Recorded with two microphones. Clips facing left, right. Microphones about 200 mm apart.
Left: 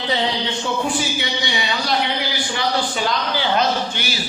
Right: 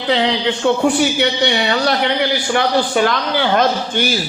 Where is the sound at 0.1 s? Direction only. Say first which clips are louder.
Right 7 dB; 70° right (ahead or behind).